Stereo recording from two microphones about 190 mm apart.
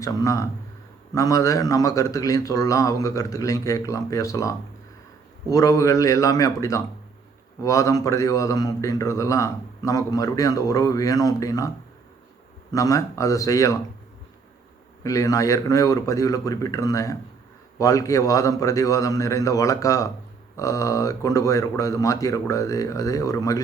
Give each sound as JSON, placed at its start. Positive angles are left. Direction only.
{"t": 0.0, "sound": "a man's voice", "side_deg": 15}
{"t": 12.7, "sound": "a man's voice", "side_deg": 15}
{"t": 15.0, "sound": "a man's voice", "side_deg": 15}